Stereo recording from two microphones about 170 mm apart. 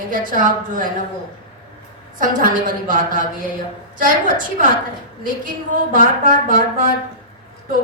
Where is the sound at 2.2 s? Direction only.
50° right (ahead or behind).